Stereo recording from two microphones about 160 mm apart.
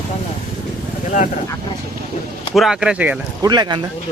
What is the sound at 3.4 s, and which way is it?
Speech, 25° right (ahead or behind).